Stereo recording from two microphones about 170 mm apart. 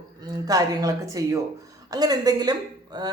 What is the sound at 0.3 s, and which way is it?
Speech, 20° right (ahead or behind).